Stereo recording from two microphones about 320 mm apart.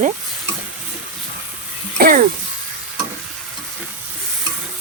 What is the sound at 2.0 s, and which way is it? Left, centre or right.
Speech, right.